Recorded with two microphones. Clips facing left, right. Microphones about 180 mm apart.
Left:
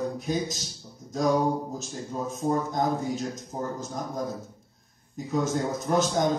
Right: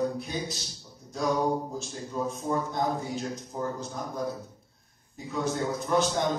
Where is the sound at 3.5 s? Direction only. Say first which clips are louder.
Even; 35° left (ahead or behind).